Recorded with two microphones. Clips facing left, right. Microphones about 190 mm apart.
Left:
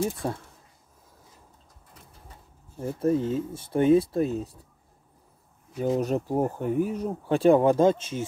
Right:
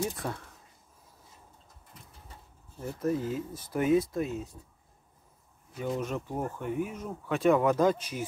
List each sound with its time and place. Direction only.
0.0 s speech: 30° left (ahead or behind)
2.8 s speech: 30° left (ahead or behind)
5.8 s speech: 35° left (ahead or behind)